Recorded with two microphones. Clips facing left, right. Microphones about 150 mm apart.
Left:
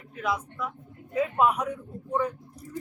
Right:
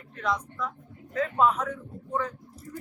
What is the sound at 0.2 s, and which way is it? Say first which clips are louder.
Speech: even; 5° left (ahead or behind).